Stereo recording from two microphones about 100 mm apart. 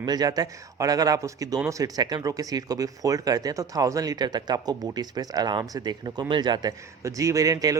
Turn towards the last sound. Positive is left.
turn(degrees=-35)  # may be behind; listen again after turning